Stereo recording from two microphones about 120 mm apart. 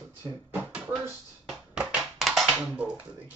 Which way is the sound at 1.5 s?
Centre (ahead or behind).